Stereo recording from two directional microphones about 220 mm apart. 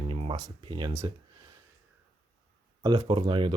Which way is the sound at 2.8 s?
20° right (ahead or behind).